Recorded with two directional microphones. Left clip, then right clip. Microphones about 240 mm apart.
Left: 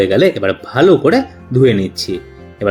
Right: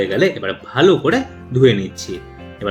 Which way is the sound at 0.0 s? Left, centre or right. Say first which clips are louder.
Left 5 dB; left.